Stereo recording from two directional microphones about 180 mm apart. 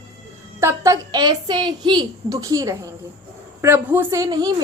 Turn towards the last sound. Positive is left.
turn(degrees=-20)  # may be behind; listen again after turning